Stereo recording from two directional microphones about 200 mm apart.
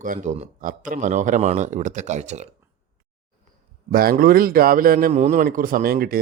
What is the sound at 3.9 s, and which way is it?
A man's voice, 45° right (ahead or behind).